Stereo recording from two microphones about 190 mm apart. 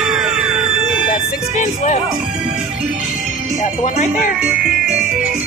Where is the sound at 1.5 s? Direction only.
40° left (ahead or behind).